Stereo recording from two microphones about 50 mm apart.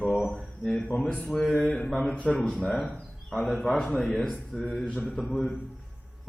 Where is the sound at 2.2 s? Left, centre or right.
Left.